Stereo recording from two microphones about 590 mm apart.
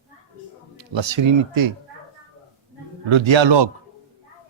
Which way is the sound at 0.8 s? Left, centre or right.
Right.